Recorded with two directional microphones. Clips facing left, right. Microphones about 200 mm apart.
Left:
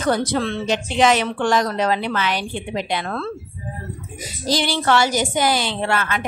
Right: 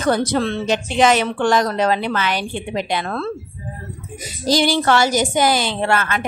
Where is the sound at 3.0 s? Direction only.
35° right (ahead or behind).